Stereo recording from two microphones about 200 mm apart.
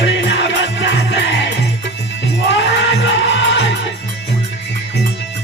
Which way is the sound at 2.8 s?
60° left (ahead or behind).